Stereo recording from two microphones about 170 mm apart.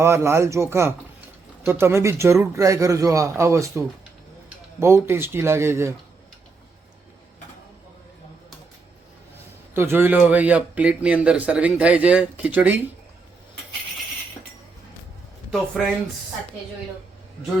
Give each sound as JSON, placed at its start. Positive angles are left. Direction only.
{"t": 0.0, "sound": "a man's voice", "side_deg": -15}
{"t": 9.7, "sound": "a man's voice", "side_deg": -15}
{"t": 15.4, "sound": "speech", "side_deg": 0}